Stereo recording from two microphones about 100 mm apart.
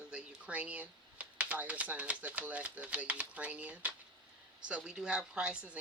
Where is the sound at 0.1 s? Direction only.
10° right (ahead or behind).